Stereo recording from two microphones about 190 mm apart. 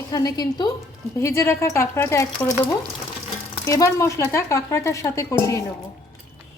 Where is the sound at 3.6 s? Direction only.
15° left (ahead or behind).